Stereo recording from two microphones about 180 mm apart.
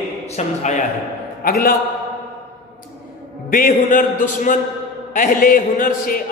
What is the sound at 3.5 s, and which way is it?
A man's voice, 50° left (ahead or behind).